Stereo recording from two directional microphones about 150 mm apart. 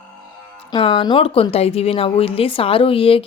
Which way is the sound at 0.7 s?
35° left (ahead or behind).